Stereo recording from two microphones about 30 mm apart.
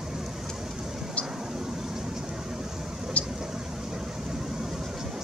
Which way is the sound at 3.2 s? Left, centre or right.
Left.